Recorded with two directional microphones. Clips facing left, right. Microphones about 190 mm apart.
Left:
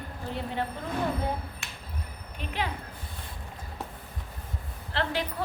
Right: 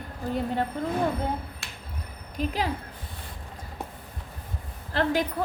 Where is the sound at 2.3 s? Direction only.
35° right (ahead or behind).